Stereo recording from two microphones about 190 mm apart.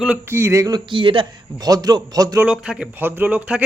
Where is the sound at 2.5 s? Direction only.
5° right (ahead or behind).